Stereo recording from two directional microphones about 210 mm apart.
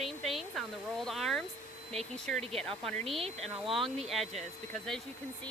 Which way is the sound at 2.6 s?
Centre (ahead or behind).